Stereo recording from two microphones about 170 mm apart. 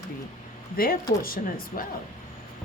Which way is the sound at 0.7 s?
60° left (ahead or behind).